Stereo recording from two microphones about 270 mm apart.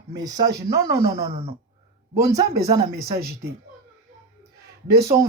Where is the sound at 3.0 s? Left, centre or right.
Right.